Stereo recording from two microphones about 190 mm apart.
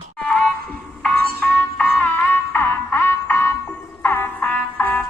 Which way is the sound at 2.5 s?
10° left (ahead or behind).